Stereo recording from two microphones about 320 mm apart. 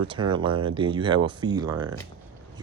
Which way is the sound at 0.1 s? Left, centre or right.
Centre.